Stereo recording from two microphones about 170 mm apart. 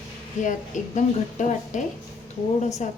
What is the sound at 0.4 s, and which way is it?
A woman's voice, 45° left (ahead or behind).